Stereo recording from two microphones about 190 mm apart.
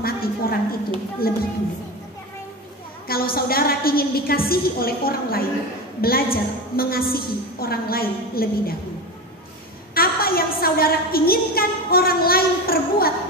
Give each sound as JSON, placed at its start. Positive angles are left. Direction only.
{"t": 0.0, "sound": "a sound", "side_deg": 50}
{"t": 1.2, "sound": "a woman's voice", "side_deg": 50}
{"t": 3.1, "sound": "a woman's voice", "side_deg": 50}
{"t": 9.9, "sound": "a woman's voice", "side_deg": 50}